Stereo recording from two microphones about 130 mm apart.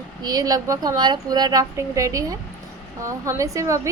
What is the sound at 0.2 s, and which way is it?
A woman's voice, 30° right (ahead or behind).